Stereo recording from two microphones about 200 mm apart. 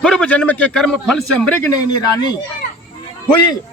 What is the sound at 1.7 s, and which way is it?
Speech, 20° left (ahead or behind).